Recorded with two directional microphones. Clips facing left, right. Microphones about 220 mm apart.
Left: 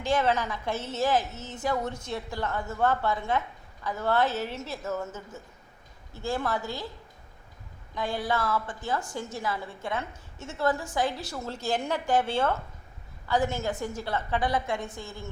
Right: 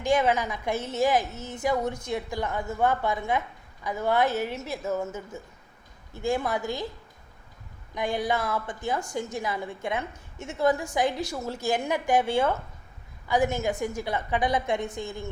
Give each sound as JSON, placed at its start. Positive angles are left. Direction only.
{"t": 0.0, "sound": "a woman's voice", "side_deg": -15}
{"t": 7.9, "sound": "a woman's voice", "side_deg": -15}